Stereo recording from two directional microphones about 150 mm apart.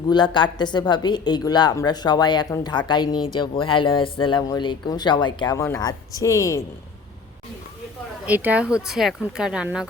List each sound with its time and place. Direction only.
0.1 s a woman's voice: 30° left (ahead or behind)
8.3 s speech: 10° right (ahead or behind)